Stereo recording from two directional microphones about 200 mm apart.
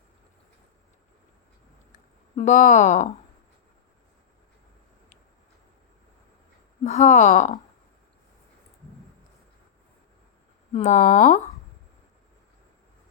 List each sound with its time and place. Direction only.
2.3 s speech: 35° left (ahead or behind)
6.8 s speech: 35° left (ahead or behind)
10.7 s speech: 35° left (ahead or behind)